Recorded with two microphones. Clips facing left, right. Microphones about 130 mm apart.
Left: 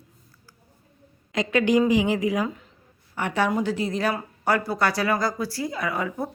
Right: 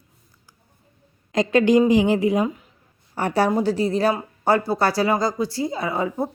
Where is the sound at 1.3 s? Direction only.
35° right (ahead or behind).